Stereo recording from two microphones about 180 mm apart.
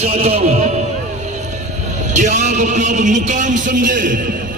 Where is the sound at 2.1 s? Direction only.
40° right (ahead or behind).